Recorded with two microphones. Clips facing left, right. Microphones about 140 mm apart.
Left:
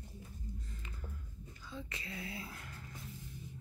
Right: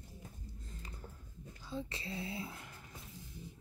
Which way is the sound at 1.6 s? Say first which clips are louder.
Right 5 dB; 30° right (ahead or behind).